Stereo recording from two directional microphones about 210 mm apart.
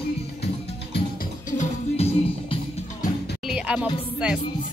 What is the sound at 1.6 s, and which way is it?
Music, 30° left (ahead or behind).